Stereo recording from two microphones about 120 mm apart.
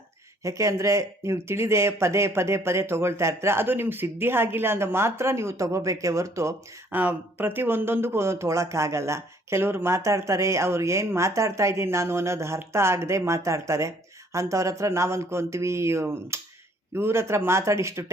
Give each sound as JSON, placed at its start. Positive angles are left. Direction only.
{"t": 0.4, "sound": "speech", "side_deg": -25}
{"t": 6.9, "sound": "speech", "side_deg": -15}